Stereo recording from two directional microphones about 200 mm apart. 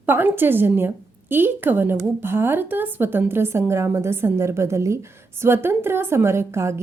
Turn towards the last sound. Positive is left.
turn(degrees=-15)  # may be behind; listen again after turning